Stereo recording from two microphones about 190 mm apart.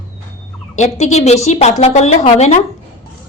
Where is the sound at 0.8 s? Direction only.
35° left (ahead or behind).